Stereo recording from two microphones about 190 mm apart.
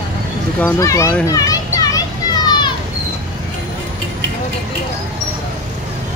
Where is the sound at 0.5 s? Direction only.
15° left (ahead or behind).